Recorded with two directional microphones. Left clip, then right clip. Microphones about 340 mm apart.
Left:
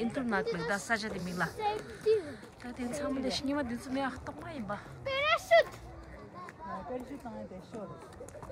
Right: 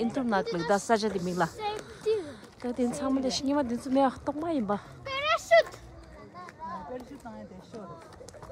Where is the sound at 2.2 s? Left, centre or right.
Centre.